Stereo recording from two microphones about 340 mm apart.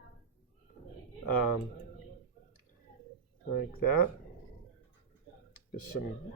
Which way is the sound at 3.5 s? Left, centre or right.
Left.